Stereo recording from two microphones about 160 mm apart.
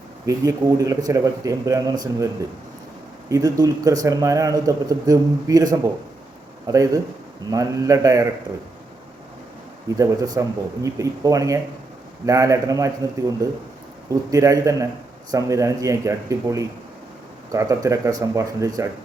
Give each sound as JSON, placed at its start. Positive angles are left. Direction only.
{"t": 0.3, "sound": "a man's voice", "side_deg": -20}
{"t": 10.0, "sound": "a man's voice", "side_deg": -20}